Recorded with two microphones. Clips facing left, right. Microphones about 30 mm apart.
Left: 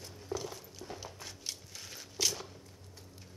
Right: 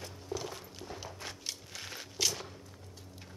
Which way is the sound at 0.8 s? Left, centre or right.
Centre.